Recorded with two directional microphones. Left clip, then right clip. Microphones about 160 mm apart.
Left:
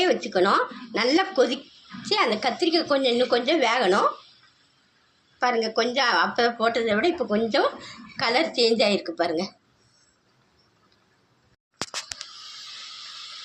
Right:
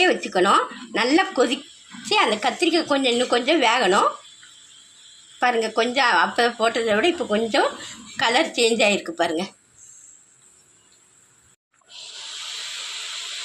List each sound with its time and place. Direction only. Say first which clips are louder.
0.0 s speech: right 3 dB; 20° right (ahead or behind)
5.4 s a woman's voice: right 3 dB; 20° right (ahead or behind)